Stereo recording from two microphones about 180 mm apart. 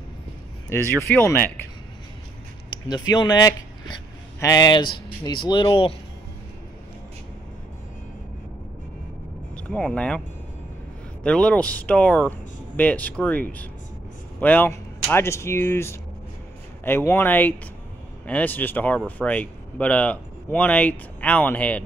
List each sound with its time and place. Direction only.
0.7 s speech: 15° left (ahead or behind)
2.9 s speech: 25° left (ahead or behind)
9.6 s speech: 5° left (ahead or behind)
11.2 s speech: 5° left (ahead or behind)